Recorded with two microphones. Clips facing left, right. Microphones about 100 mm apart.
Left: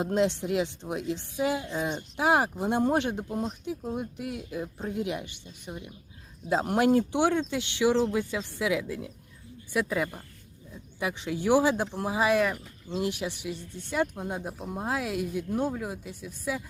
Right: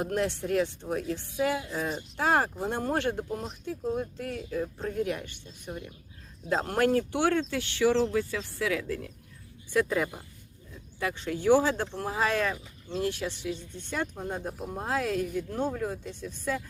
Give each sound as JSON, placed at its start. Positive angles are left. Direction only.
{"t": 0.0, "sound": "speech", "side_deg": 20}
{"t": 1.5, "sound": "a woman's voice", "side_deg": 0}
{"t": 2.1, "sound": "a woman's voice", "side_deg": 15}
{"t": 6.7, "sound": "speech", "side_deg": 15}